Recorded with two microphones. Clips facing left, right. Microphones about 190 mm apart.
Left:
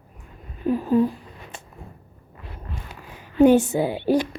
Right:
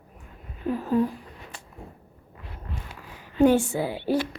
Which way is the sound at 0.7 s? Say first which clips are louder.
Left 4 dB; 15° left (ahead or behind).